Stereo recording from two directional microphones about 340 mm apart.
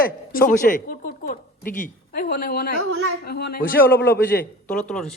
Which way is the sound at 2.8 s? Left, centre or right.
Right.